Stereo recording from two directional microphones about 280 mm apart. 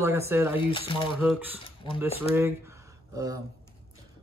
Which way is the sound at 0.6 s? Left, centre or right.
Centre.